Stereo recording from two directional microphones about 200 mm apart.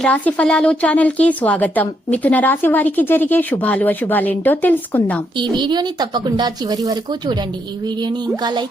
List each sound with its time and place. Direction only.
0.0 s a woman's voice: 5° left (ahead or behind)
5.4 s a woman's voice: 20° right (ahead or behind)